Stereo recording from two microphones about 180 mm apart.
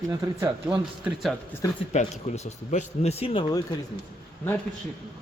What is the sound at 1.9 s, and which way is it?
Speech, 40° left (ahead or behind).